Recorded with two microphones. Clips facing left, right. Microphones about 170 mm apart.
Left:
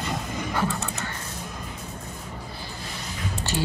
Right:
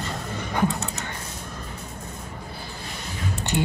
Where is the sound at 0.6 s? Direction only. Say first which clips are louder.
Right 4 dB; 15° right (ahead or behind).